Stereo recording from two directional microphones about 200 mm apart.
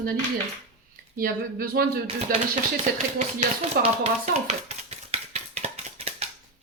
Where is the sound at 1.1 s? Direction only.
45° right (ahead or behind).